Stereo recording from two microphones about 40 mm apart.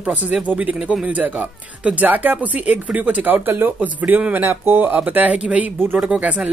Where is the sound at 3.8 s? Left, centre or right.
Right.